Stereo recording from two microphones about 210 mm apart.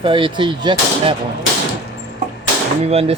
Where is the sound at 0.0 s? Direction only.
25° right (ahead or behind).